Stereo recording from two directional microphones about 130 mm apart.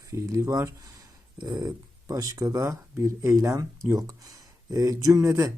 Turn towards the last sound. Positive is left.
turn(degrees=-25)  # may be behind; listen again after turning